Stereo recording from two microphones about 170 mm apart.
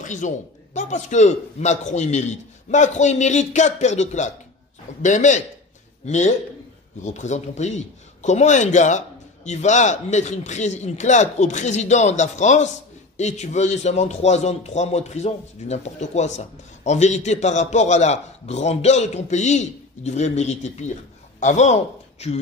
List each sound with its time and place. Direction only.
0.0 s a man's voice: 45° left (ahead or behind)